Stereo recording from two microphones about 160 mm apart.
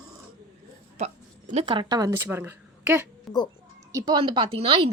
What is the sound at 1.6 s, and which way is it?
A woman's voice, 30° right (ahead or behind).